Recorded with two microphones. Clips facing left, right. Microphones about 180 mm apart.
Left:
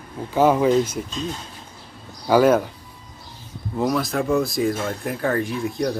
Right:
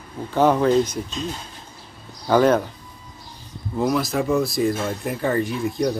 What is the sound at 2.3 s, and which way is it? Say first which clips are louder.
Speech: left 1 dB; 5° left (ahead or behind).